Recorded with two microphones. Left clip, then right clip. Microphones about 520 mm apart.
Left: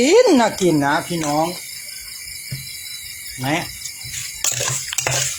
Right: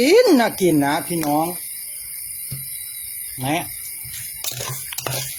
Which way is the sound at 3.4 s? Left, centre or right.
Right.